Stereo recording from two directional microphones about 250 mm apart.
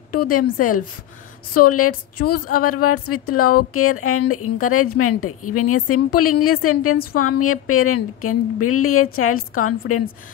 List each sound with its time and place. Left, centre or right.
0.2 s speech: left